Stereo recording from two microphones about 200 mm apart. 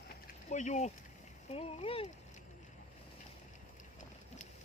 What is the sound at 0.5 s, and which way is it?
Speech, 35° left (ahead or behind).